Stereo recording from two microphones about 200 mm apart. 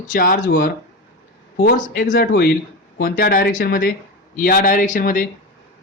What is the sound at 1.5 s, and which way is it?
Speech, 50° left (ahead or behind).